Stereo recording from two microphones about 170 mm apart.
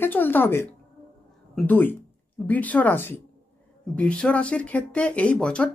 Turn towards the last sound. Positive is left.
turn(degrees=5)  # may be behind; listen again after turning